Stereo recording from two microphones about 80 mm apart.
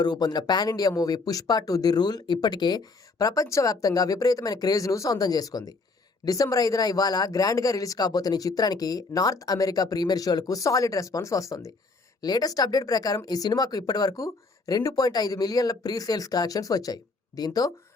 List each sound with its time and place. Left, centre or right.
0.0 s speech: left